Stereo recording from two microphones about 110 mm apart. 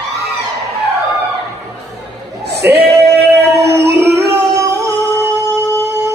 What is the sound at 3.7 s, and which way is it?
Music, 25° right (ahead or behind).